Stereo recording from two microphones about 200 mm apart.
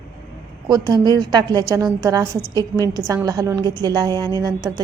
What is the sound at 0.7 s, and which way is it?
A woman's voice, 20° right (ahead or behind).